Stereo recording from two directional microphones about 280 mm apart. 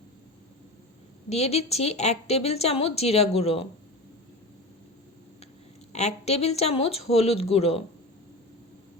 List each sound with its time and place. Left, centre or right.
1.3 s speech: left
5.9 s speech: left